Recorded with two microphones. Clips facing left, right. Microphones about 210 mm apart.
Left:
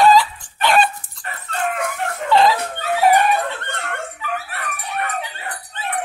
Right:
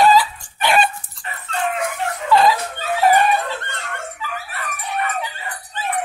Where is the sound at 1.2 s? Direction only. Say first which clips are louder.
Even; 50° left (ahead or behind).